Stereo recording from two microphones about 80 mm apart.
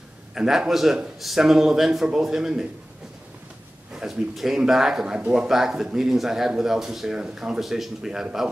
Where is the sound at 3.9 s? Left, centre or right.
Centre.